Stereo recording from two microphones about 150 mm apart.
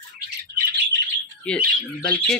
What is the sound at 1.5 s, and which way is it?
Speech, 5° left (ahead or behind).